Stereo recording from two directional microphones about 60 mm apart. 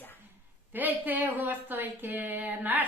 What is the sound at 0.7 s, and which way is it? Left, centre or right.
Speech, right.